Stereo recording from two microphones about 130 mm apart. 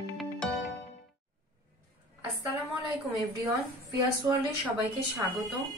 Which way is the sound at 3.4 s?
25° right (ahead or behind).